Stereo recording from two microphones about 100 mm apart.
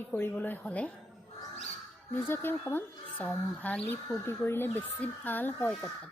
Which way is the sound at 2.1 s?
25° left (ahead or behind).